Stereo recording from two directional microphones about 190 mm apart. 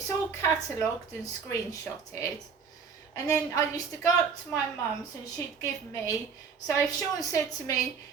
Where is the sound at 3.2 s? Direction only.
15° left (ahead or behind).